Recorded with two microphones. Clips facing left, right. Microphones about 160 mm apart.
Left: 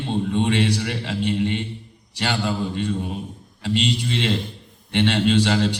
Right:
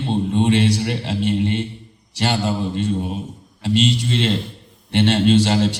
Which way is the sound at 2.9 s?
20° right (ahead or behind).